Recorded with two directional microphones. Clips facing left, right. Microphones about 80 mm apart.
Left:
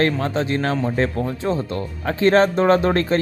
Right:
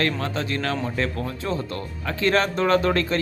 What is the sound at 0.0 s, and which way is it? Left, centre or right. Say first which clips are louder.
Speech: left 5 dB; left.